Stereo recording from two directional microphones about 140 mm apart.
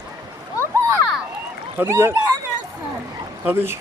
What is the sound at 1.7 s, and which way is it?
Speech, 15° right (ahead or behind).